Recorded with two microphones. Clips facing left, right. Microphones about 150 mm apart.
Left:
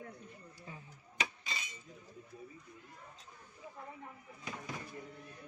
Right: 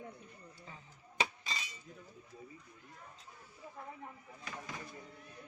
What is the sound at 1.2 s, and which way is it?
Chink, 35° right (ahead or behind).